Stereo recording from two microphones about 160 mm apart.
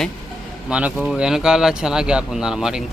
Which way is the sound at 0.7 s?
10° right (ahead or behind).